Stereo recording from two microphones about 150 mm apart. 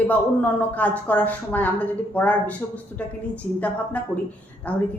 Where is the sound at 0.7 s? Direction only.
10° left (ahead or behind).